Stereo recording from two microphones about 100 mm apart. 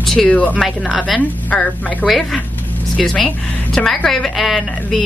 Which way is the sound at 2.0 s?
Centre (ahead or behind).